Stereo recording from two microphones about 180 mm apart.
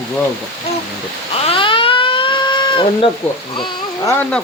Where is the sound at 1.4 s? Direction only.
30° left (ahead or behind).